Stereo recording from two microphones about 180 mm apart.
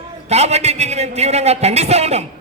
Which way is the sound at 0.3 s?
35° right (ahead or behind).